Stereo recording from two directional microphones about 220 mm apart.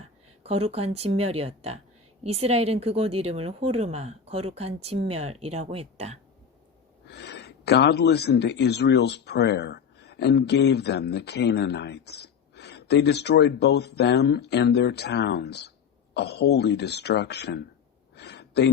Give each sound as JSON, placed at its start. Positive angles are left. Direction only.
{"t": 0.0, "sound": "a woman's voice", "side_deg": -25}
{"t": 7.1, "sound": "speech", "side_deg": 50}
{"t": 18.1, "sound": "a sound", "side_deg": 50}